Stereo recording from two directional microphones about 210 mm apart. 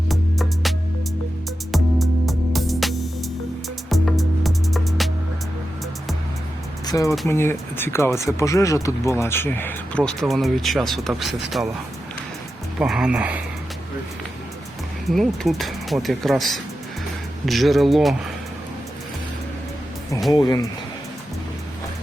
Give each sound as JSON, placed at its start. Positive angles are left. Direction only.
{"t": 0.1, "sound": "music", "side_deg": 0}
{"t": 1.7, "sound": "music", "side_deg": 0}
{"t": 6.8, "sound": "speech", "side_deg": 15}
{"t": 12.8, "sound": "speech", "side_deg": -5}
{"t": 15.1, "sound": "speech", "side_deg": 0}
{"t": 20.3, "sound": "speech", "side_deg": 15}